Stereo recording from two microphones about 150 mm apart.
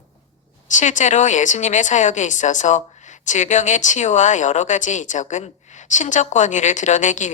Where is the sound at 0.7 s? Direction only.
55° left (ahead or behind).